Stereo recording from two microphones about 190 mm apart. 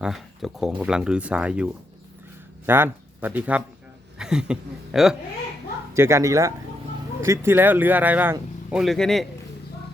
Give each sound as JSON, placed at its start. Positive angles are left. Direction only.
{"t": 0.0, "sound": "speech", "side_deg": 0}
{"t": 5.9, "sound": "speech", "side_deg": -15}